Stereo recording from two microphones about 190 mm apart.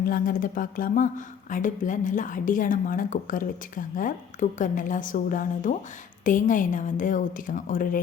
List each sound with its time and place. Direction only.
0.0 s speech: 50° left (ahead or behind)